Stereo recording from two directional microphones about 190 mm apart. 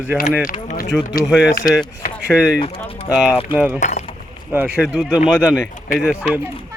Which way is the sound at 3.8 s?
40° left (ahead or behind).